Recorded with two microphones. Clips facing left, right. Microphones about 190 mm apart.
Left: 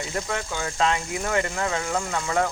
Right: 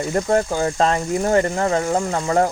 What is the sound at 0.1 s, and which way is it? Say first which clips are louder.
Speech: right 13 dB; 40° right (ahead or behind).